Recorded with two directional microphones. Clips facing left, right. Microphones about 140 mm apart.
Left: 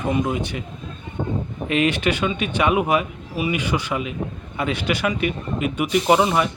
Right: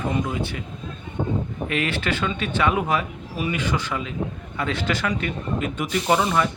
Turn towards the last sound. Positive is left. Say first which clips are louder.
# left 3 dB
turn(degrees=15)  # may be behind; listen again after turning